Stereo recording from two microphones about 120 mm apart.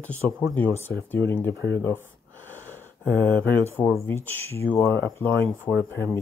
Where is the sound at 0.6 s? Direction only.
15° left (ahead or behind).